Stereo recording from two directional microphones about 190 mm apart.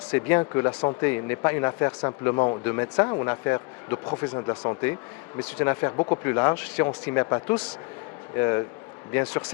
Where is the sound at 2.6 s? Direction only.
15° left (ahead or behind).